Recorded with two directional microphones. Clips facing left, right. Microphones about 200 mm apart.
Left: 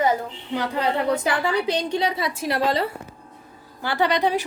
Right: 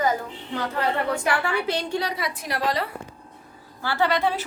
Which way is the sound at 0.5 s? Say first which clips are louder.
Left 2 dB; 15° left (ahead or behind).